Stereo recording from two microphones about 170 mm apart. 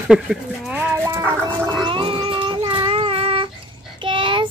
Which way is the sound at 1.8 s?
30° right (ahead or behind).